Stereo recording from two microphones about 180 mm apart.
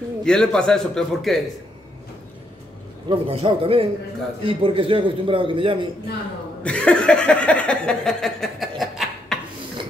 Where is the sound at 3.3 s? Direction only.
30° right (ahead or behind).